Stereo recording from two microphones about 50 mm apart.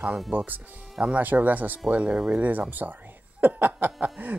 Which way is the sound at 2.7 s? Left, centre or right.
Right.